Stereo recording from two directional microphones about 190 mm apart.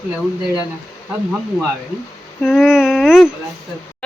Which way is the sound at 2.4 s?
Centre (ahead or behind).